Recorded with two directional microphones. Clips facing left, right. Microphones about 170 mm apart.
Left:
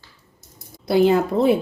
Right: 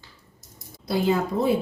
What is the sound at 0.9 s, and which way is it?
Speech, 70° left (ahead or behind).